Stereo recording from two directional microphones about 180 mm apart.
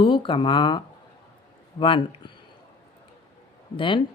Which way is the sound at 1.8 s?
25° left (ahead or behind).